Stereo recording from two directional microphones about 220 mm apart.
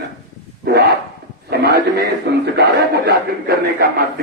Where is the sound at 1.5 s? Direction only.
45° right (ahead or behind).